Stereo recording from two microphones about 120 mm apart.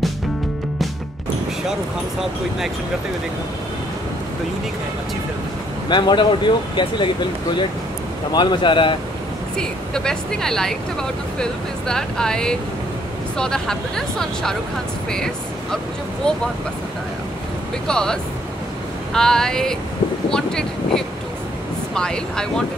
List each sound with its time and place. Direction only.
5.9 s speech: 40° left (ahead or behind)
8.3 s speech: 40° left (ahead or behind)
9.6 s speech: 5° left (ahead or behind)
17.8 s speech: 5° left (ahead or behind)